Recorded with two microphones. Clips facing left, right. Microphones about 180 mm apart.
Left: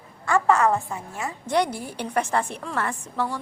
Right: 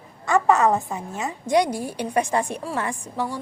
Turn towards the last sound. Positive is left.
turn(degrees=-10)  # may be behind; listen again after turning